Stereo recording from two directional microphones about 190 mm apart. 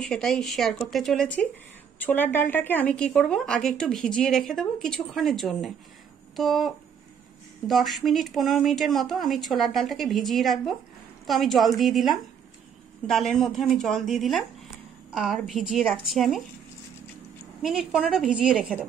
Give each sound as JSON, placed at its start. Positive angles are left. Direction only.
{"t": 0.0, "sound": "speech", "side_deg": 5}
{"t": 17.6, "sound": "speech", "side_deg": 0}